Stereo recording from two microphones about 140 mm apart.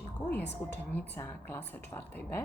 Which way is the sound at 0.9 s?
15° left (ahead or behind).